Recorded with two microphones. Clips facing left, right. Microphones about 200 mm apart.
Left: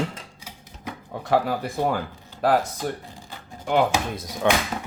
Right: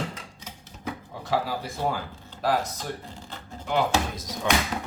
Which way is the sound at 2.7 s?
10° left (ahead or behind).